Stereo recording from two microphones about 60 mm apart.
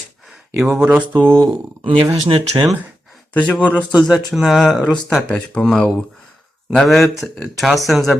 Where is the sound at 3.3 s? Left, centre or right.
Left.